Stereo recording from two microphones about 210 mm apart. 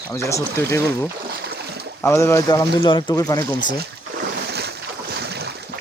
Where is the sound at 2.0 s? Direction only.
15° left (ahead or behind).